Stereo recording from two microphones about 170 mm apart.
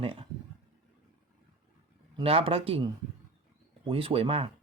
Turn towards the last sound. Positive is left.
turn(degrees=-35)  # may be behind; listen again after turning